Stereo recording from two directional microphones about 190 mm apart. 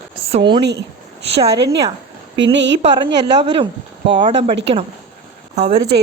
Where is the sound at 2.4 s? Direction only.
70° right (ahead or behind).